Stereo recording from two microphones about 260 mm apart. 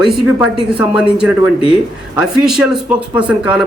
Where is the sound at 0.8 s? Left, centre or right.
Centre.